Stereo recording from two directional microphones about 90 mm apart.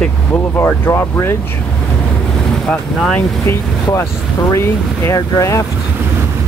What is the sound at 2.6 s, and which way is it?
Speech, 10° left (ahead or behind).